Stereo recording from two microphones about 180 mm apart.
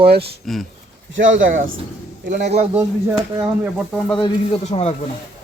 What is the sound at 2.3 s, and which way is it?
Speech, 40° right (ahead or behind).